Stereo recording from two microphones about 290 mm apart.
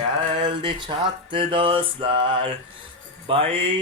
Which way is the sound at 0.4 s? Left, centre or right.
Centre.